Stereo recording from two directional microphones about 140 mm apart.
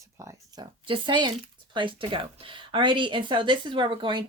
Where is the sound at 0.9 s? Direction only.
35° right (ahead or behind).